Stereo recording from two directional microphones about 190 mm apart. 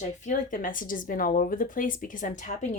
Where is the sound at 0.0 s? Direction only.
40° left (ahead or behind).